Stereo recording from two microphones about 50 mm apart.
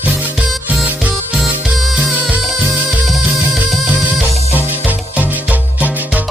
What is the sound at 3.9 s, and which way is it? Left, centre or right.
Music, right.